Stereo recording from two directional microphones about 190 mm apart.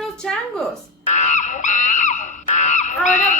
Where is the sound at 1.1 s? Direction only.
40° left (ahead or behind).